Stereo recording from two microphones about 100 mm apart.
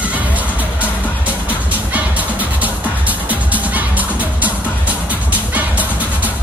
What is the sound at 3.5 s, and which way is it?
Music, 15° right (ahead or behind).